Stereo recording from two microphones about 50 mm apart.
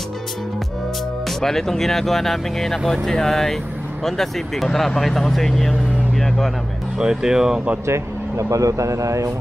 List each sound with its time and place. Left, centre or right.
1.4 s speech: centre
7.0 s speech: centre
7.8 s speech: right